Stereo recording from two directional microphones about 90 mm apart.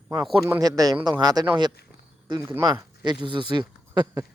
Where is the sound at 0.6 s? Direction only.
45° right (ahead or behind).